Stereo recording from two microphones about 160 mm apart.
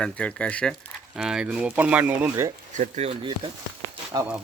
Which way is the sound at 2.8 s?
45° right (ahead or behind).